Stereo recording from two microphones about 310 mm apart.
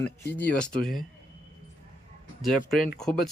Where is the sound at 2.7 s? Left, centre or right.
Left.